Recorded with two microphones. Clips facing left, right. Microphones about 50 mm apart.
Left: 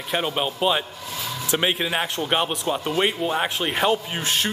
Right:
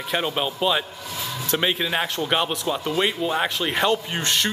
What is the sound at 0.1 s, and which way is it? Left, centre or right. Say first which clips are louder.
Speech: even; centre.